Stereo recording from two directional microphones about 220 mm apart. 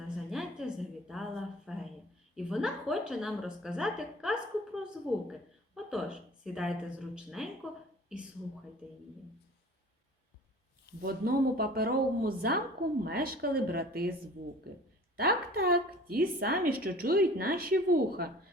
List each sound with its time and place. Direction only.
0.3 s a sound: 5° right (ahead or behind)
2.3 s a woman's voice: 5° right (ahead or behind)
11.0 s speech: 45° right (ahead or behind)
15.1 s a woman's voice: 45° right (ahead or behind)